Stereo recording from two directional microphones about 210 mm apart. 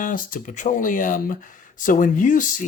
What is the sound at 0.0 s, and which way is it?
Speech, 40° left (ahead or behind).